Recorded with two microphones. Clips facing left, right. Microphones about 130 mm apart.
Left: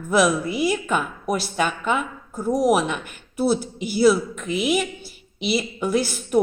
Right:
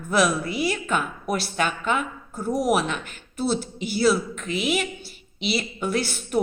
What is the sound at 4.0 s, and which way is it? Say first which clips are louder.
A woman's voice: left 4 dB; 5° left (ahead or behind).